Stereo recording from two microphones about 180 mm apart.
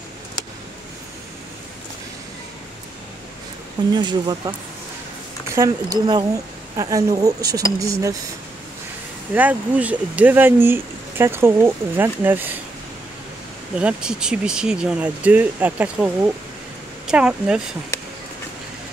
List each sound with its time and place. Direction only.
3.9 s speech: 25° right (ahead or behind)
9.3 s speech: 10° right (ahead or behind)
13.7 s speech: 5° right (ahead or behind)